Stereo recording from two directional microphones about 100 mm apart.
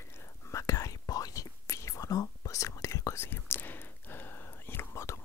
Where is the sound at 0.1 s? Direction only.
30° left (ahead or behind).